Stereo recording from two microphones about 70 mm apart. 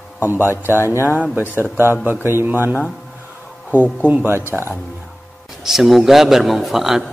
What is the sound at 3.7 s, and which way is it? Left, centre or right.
Speech, left.